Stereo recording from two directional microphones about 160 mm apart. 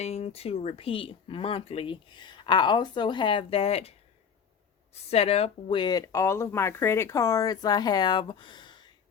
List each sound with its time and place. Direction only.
0.0 s speech: 45° left (ahead or behind)
5.1 s speech: 40° left (ahead or behind)